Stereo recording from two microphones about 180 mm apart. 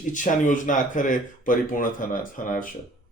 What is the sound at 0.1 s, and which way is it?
A man's voice, 45° left (ahead or behind).